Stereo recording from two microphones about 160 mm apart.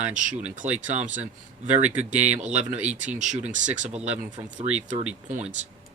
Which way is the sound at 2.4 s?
45° right (ahead or behind).